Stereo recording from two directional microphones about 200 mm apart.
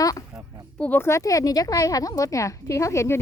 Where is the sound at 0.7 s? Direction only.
10° left (ahead or behind).